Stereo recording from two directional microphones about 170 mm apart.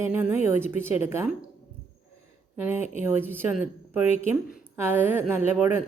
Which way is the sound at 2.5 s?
10° right (ahead or behind).